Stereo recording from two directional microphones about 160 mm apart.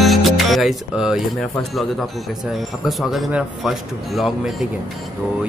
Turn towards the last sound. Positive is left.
turn(degrees=0)  # may be behind; listen again after turning